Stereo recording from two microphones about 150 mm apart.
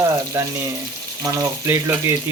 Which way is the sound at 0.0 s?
20° right (ahead or behind).